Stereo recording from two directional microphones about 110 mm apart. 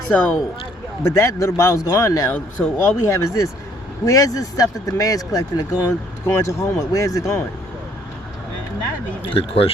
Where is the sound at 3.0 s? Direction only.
25° left (ahead or behind).